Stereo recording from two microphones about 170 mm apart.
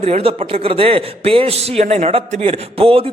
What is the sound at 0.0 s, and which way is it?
A man's voice, 35° right (ahead or behind).